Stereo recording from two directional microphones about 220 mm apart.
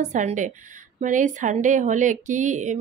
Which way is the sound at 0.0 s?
35° right (ahead or behind).